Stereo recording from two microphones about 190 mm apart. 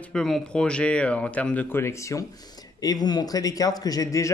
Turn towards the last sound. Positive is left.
turn(degrees=15)  # may be behind; listen again after turning